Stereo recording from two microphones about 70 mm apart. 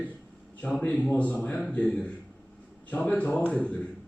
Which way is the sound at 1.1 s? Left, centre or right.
Left.